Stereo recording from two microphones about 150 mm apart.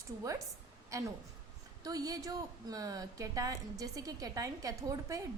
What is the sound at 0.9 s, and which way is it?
A woman's voice, 20° right (ahead or behind).